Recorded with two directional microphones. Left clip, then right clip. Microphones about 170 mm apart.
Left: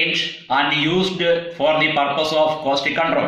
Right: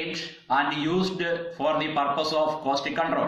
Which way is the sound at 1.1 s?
5° left (ahead or behind).